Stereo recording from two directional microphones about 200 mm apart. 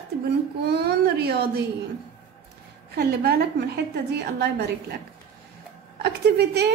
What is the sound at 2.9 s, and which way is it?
A woman's voice, 50° right (ahead or behind).